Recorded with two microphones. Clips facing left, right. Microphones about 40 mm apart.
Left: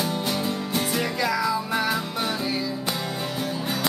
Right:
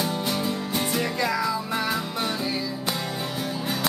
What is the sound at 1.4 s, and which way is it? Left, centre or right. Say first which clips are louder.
Music: left 2 dB; centre.